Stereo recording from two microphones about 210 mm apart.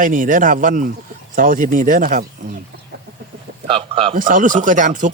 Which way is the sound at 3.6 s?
25° right (ahead or behind).